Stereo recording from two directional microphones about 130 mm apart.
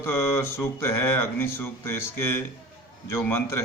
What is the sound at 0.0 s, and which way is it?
Speech, 20° left (ahead or behind).